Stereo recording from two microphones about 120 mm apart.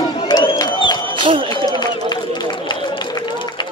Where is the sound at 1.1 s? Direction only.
45° right (ahead or behind).